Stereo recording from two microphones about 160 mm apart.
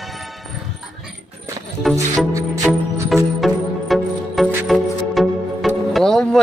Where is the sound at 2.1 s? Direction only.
20° right (ahead or behind).